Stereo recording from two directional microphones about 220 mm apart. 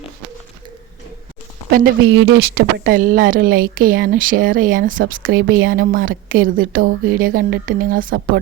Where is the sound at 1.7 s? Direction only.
40° right (ahead or behind).